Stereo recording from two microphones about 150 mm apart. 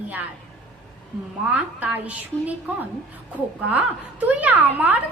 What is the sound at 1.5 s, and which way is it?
A woman's voice, 10° right (ahead or behind).